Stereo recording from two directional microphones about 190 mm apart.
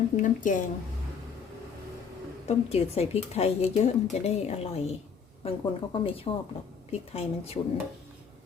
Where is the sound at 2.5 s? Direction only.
35° left (ahead or behind).